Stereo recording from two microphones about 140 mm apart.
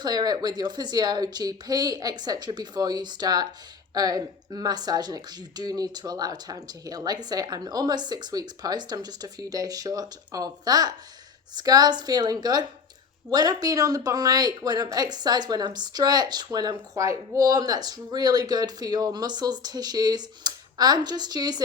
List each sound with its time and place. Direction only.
0.0 s speech: 30° right (ahead or behind)